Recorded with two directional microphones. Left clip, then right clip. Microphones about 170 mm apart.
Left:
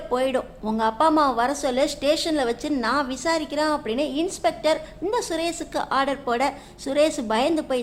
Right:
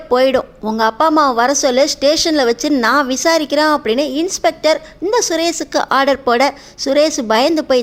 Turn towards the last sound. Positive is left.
turn(degrees=-35)  # may be behind; listen again after turning